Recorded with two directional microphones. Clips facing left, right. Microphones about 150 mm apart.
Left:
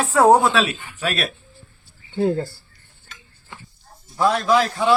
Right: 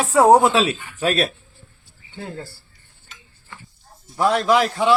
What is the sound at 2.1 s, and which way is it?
Speech, 25° left (ahead or behind).